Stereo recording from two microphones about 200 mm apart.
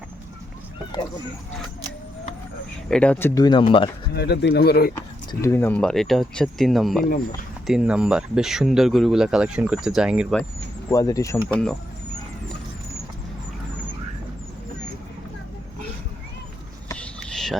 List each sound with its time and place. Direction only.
2.9 s speech: 5° left (ahead or behind); by 3.8 s 25° left (ahead or behind)
4.1 s speech: 55° left (ahead or behind)
4.9 s speech: 15° left (ahead or behind); by 10.4 s 5° right (ahead or behind)
10.9 s speech: 15° left (ahead or behind)
11.4 s speech: 5° left (ahead or behind)
16.9 s a sound: 5° left (ahead or behind)